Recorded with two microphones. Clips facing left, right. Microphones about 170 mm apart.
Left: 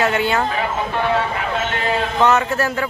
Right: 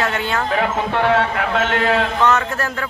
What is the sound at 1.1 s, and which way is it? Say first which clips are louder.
Speech: right 2 dB; 75° right (ahead or behind).